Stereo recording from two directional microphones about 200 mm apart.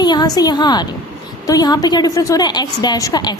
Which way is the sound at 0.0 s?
20° left (ahead or behind).